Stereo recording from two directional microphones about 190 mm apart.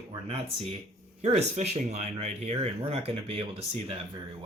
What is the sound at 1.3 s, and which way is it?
Speech, 35° right (ahead or behind).